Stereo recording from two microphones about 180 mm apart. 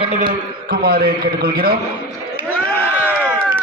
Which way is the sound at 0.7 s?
60° right (ahead or behind).